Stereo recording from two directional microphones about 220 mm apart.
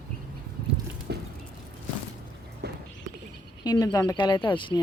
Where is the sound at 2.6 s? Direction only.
45° right (ahead or behind).